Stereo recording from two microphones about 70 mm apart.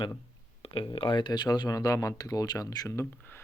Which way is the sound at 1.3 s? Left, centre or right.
Left.